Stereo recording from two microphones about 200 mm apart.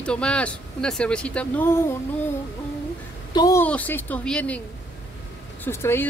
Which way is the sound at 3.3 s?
20° left (ahead or behind).